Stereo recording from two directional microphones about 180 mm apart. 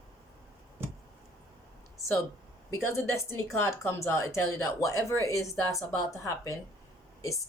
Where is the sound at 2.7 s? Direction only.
15° left (ahead or behind).